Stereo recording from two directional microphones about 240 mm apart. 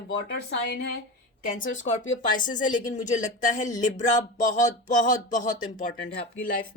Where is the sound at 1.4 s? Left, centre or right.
Left.